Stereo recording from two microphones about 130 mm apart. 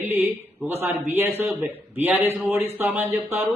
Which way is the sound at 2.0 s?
15° right (ahead or behind).